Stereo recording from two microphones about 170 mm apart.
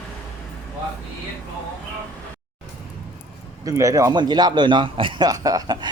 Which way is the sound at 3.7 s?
20° right (ahead or behind).